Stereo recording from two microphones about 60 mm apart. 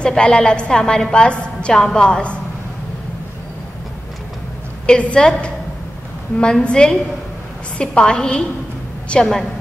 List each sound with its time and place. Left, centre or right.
0.0 s a woman's voice: centre
4.8 s a woman's voice: centre